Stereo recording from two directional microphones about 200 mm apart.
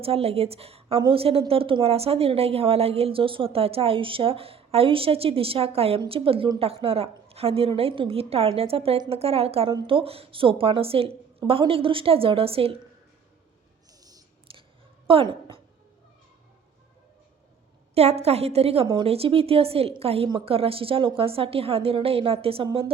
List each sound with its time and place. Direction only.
0.0 s a woman's voice: 30° right (ahead or behind)
14.0 s whispering: 20° right (ahead or behind)
15.0 s a sound: 25° right (ahead or behind)
17.9 s a woman's voice: 30° right (ahead or behind)